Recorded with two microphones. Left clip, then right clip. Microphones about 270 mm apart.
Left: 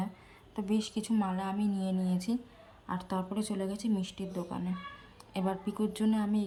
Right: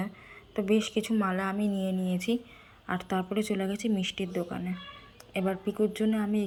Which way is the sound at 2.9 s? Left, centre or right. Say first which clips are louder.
Right 5 dB; centre.